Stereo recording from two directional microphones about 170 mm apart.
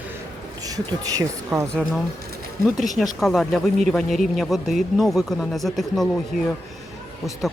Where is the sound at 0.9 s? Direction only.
20° right (ahead or behind).